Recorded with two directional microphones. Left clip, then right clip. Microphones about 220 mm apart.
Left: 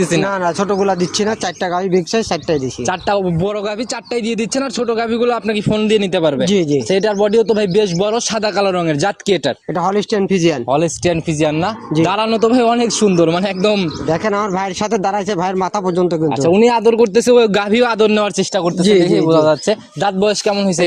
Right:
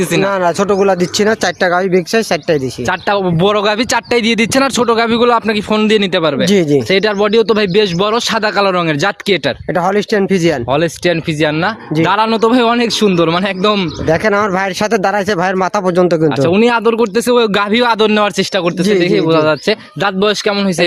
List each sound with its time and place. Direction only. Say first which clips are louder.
0.4 s speech: right 4 dB; 30° right (ahead or behind)
3.2 s speech: right 7 dB; 35° right (ahead or behind)
18.8 s a man's voice: left 1 dB; 10° right (ahead or behind)